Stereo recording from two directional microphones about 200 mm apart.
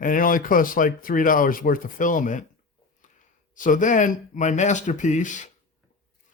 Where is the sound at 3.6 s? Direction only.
40° left (ahead or behind).